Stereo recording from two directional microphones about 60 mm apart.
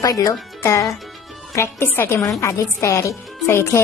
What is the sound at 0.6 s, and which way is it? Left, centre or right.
A woman's voice, left.